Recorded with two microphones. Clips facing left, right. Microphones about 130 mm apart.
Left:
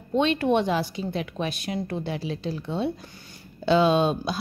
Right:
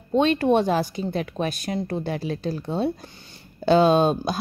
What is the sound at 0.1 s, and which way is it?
A woman's voice, 40° right (ahead or behind).